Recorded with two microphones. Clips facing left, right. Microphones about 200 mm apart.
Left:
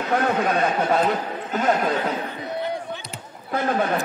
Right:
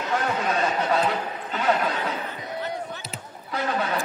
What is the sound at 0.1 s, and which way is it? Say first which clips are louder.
Speech: left 4 dB; 55° left (ahead or behind).